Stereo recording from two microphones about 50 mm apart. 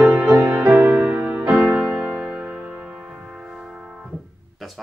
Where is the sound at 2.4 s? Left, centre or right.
Right.